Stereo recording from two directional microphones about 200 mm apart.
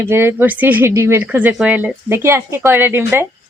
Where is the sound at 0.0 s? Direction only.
10° right (ahead or behind).